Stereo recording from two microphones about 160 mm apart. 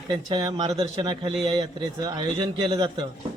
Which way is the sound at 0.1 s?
25° right (ahead or behind).